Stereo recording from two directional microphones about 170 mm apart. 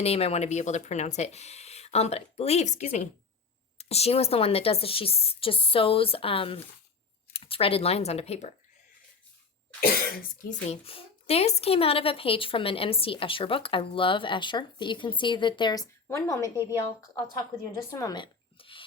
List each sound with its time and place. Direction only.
0.0 s speech: 35° left (ahead or behind)
9.8 s cough: 60° left (ahead or behind)
10.7 s a woman's voice: 35° left (ahead or behind)